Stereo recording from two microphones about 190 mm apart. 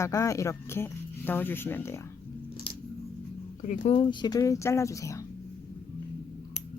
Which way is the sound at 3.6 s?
40° left (ahead or behind).